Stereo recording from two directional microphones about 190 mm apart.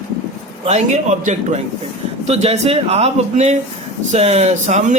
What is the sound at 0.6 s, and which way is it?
Speech, 35° right (ahead or behind).